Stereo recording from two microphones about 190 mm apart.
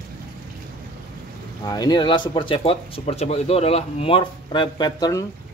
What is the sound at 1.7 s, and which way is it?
A man's voice, 20° left (ahead or behind).